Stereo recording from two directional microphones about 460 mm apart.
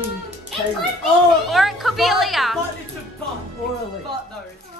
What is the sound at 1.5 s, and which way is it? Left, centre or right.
A woman's voice, centre.